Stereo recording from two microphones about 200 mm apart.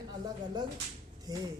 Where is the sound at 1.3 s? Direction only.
20° right (ahead or behind).